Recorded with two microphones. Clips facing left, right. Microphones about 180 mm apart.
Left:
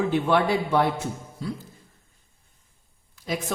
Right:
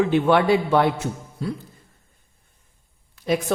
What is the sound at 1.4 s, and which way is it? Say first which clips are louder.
Speech: right 4 dB; 65° right (ahead or behind).